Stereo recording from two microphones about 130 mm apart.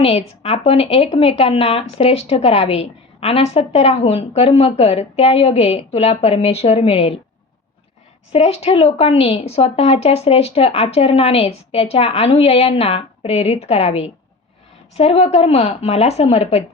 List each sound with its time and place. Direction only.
0.0 s speech: 50° left (ahead or behind)
8.3 s speech: 50° left (ahead or behind)